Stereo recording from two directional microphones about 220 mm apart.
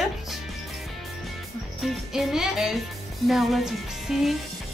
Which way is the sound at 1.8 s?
Centre (ahead or behind).